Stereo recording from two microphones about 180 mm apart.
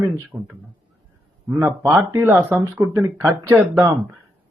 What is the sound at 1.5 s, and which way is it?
A man's voice, 15° right (ahead or behind).